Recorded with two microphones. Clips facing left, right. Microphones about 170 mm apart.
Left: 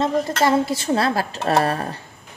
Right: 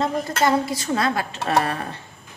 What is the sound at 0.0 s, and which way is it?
A woman's voice, 25° left (ahead or behind).